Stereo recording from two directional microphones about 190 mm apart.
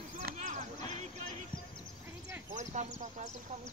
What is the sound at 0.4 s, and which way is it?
Clip-clop, 40° right (ahead or behind).